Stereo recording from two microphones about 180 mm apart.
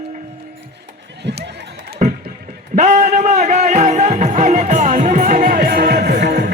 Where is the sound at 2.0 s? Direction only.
45° right (ahead or behind).